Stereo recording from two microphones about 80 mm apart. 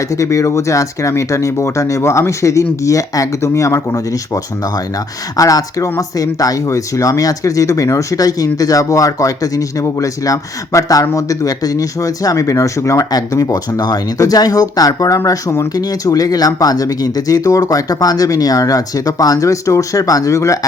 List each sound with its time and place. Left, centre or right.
0.1 s speech: left
5.4 s speech: left